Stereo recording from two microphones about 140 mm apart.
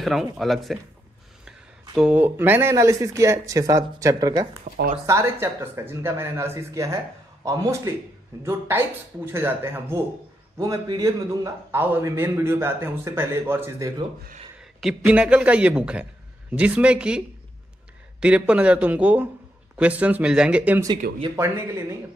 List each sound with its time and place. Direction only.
0.0 s speech: centre (ahead or behind)
2.0 s speech: 10° right (ahead or behind)
4.7 s speech: 45° right (ahead or behind)
5.0 s a man's voice: 20° right (ahead or behind)
14.6 s a man's voice: 5° right (ahead or behind)
18.2 s a man's voice: 10° right (ahead or behind)